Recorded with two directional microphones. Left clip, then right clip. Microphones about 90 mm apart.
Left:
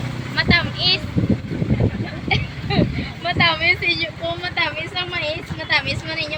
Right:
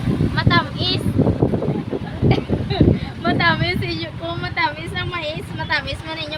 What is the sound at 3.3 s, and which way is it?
Speech, 90° right.